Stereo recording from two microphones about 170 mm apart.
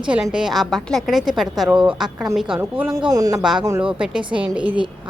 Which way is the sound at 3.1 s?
20° right (ahead or behind).